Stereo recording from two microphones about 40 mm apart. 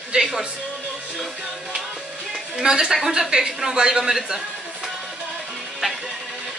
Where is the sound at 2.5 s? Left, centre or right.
Centre.